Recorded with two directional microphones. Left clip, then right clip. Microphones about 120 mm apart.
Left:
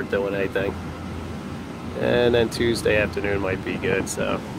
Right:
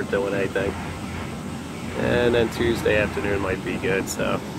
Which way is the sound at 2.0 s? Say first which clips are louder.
Left 1 dB; 25° left (ahead or behind).